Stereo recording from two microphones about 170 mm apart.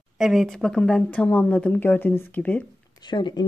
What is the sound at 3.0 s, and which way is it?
Speech, 25° left (ahead or behind).